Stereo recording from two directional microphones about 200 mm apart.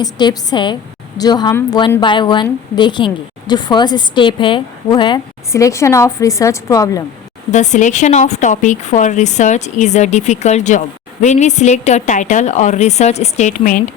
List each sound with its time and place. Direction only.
0.0 s a woman's voice: 20° left (ahead or behind)
7.5 s a woman's voice: 35° left (ahead or behind)